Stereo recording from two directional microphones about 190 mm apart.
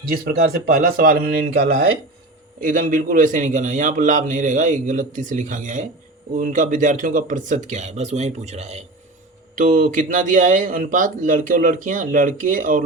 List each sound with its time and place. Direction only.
0.1 s a man's voice: 55° right (ahead or behind)